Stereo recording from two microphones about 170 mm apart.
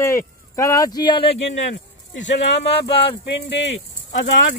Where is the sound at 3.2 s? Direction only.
90° left.